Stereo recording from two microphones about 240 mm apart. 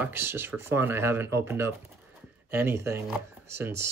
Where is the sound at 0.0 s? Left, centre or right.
Centre.